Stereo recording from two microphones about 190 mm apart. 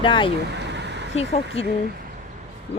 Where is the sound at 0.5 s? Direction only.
65° right (ahead or behind).